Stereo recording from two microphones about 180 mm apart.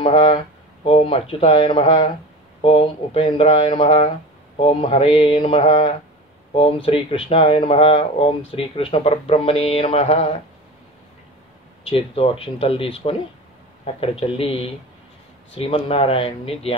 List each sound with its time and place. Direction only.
0.0 s speech: 30° left (ahead or behind)
5.6 s speech: 40° left (ahead or behind)
11.8 s speech: 30° left (ahead or behind)